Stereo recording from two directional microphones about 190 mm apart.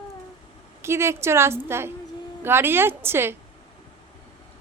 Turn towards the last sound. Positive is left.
turn(degrees=-10)  # may be behind; listen again after turning